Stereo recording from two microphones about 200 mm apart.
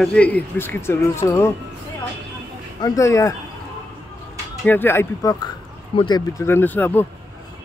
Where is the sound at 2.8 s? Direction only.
15° left (ahead or behind).